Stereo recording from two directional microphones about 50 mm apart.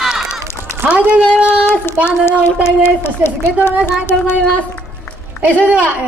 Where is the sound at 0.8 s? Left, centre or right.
Right.